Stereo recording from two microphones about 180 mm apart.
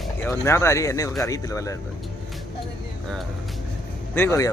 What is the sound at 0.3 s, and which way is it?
Speech, 15° left (ahead or behind).